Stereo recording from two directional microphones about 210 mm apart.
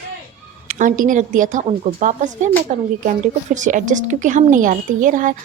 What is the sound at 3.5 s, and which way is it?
A woman's voice, 35° right (ahead or behind).